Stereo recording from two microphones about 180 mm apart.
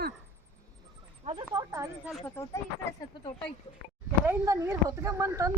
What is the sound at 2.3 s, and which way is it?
Speech, 15° left (ahead or behind).